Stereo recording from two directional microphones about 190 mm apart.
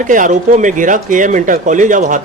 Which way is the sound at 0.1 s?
40° right (ahead or behind).